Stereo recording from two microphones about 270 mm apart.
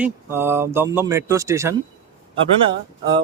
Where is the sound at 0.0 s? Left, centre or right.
Centre.